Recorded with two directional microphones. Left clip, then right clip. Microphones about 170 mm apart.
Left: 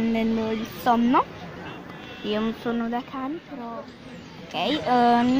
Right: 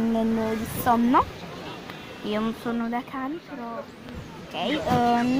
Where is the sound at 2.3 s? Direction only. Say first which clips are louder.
Left 1 dB; 5° left (ahead or behind).